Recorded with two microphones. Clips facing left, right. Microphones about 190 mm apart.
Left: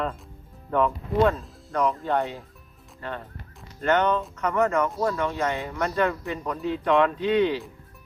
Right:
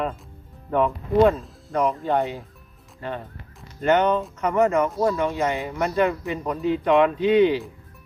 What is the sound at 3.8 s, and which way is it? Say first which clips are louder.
Speech: right 3 dB; 15° right (ahead or behind).